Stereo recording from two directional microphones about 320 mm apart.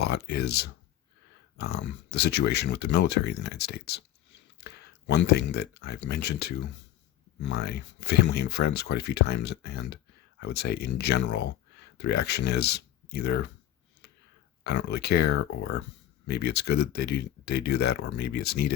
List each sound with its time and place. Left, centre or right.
0.0 s speech: left
14.6 s speech: left